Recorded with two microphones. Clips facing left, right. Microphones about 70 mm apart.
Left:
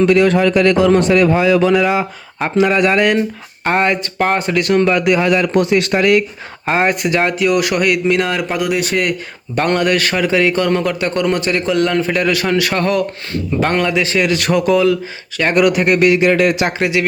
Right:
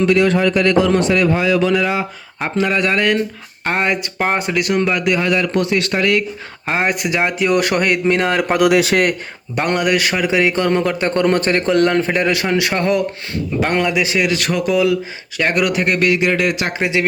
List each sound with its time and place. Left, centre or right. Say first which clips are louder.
0.0 s a man's voice: left 2 dB; left
1.7 s a man's voice: left 3 dB; centre
3.7 s a man's voice: left 3 dB; centre
6.7 s speech: left 3 dB; centre
7.3 s a man's voice: left 1 dB; right
9.6 s a man's voice: left 2 dB; centre; by 12.0 s right
12.0 s a man's voice: left 1 dB; right
14.3 s speech: left 4 dB; centre
16.2 s speech: left 4 dB; left
16.7 s a man's voice: left 1 dB; right